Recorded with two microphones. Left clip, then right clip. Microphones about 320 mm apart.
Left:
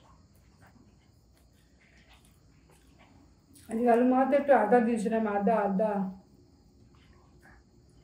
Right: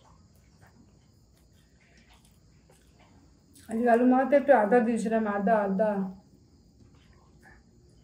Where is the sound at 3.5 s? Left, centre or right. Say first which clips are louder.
Right 1 dB; centre.